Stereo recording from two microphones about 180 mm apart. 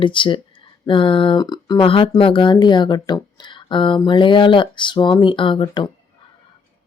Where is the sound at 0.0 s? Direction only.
25° left (ahead or behind).